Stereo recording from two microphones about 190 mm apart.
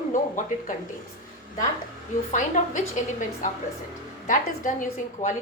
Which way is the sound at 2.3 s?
40° left (ahead or behind).